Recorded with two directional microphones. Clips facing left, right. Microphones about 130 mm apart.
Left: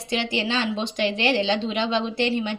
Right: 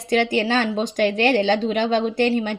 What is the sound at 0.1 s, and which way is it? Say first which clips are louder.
A woman's voice: right 6 dB; 50° right (ahead or behind).